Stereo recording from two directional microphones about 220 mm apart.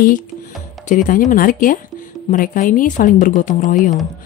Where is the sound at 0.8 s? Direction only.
40° left (ahead or behind).